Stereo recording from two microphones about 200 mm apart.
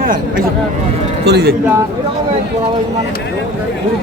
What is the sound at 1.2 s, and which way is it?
Speech, 55° right (ahead or behind).